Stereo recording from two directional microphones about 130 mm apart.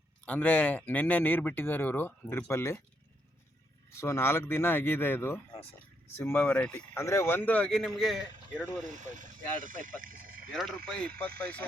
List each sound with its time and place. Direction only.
0.3 s speech: 10° left (ahead or behind)
3.9 s speech: 20° left (ahead or behind)
6.9 s speech: 20° left (ahead or behind); by 8.2 s centre (ahead or behind)
8.8 s speech: 75° right (ahead or behind)
10.5 s speech: 5° left (ahead or behind)